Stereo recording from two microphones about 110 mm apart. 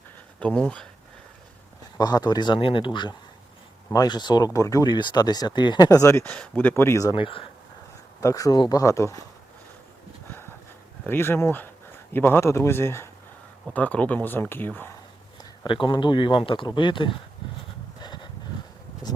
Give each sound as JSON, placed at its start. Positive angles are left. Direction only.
{"t": 0.3, "sound": "speech", "side_deg": 10}
{"t": 2.0, "sound": "speech", "side_deg": 40}
{"t": 4.9, "sound": "speech", "side_deg": 45}
{"t": 7.1, "sound": "speech", "side_deg": 50}
{"t": 8.2, "sound": "speech", "side_deg": 30}
{"t": 11.0, "sound": "speech", "side_deg": 20}
{"t": 15.4, "sound": "speech", "side_deg": 45}
{"t": 18.0, "sound": "a sound", "side_deg": 40}